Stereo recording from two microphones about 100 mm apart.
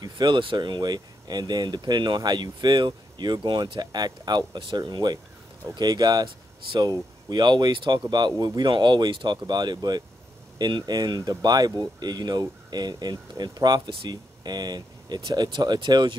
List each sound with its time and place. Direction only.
0.0 s speech: 50° right (ahead or behind)
6.2 s speech: 55° right (ahead or behind)